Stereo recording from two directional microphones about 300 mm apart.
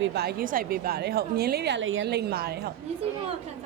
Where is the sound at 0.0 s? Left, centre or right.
Right.